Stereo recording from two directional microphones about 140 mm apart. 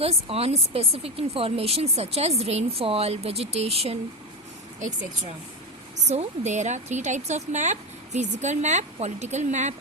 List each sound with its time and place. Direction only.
0.0 s speech: 45° right (ahead or behind)
4.8 s a woman's voice: 60° right (ahead or behind)